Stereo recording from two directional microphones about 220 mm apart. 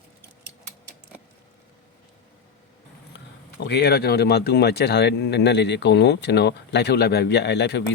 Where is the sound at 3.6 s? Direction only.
50° left (ahead or behind).